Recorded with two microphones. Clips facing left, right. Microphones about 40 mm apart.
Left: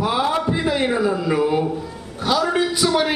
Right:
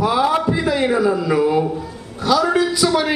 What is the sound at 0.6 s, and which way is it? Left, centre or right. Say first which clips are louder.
A man's voice: right 3 dB; centre.